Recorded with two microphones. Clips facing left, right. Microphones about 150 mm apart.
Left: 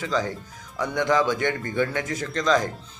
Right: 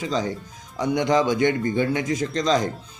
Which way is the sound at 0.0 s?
20° right (ahead or behind).